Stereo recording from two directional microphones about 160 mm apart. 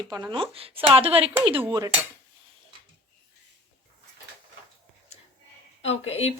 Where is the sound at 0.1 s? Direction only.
30° right (ahead or behind).